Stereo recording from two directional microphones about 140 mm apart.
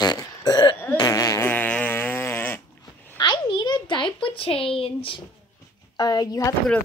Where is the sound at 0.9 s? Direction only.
25° left (ahead or behind).